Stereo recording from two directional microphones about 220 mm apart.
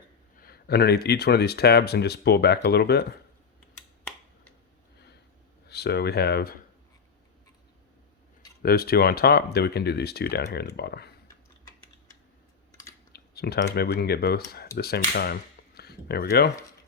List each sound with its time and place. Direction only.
0.3 s speech: 45° left (ahead or behind)
5.6 s speech: 50° left (ahead or behind)
8.6 s speech: 45° left (ahead or behind)
13.1 s a sound: 45° left (ahead or behind)
13.7 s speech: 45° left (ahead or behind)